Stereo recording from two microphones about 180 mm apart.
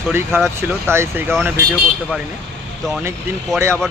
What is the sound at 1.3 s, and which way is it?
Speech, centre (ahead or behind).